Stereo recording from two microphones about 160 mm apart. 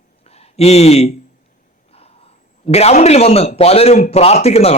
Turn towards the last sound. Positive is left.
turn(degrees=40)  # may be behind; listen again after turning